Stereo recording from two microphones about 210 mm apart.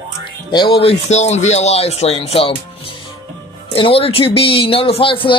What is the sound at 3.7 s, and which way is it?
Speech, 25° left (ahead or behind).